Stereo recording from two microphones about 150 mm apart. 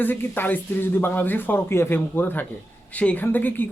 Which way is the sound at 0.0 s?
15° left (ahead or behind).